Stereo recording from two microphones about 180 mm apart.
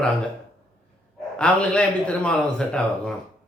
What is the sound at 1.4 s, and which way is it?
A man's voice, 5° left (ahead or behind).